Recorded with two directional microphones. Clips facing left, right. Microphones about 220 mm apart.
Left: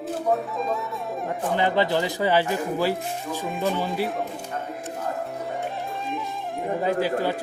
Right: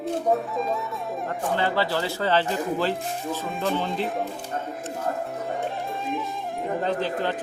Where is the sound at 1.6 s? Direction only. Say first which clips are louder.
Left 4 dB; 20° left (ahead or behind); by 4.2 s centre (ahead or behind).